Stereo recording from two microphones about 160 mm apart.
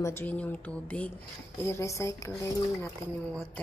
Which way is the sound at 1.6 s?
20° left (ahead or behind).